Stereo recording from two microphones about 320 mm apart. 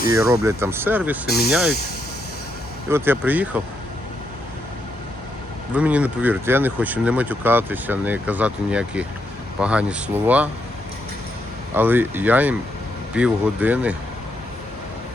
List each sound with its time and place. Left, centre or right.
0.1 s speech: centre
2.9 s speech: centre
5.7 s speech: centre
11.7 s speech: centre